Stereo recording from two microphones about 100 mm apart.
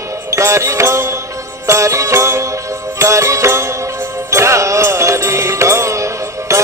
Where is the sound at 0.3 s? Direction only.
30° right (ahead or behind).